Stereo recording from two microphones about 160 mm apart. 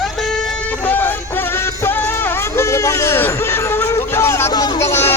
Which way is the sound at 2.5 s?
20° left (ahead or behind).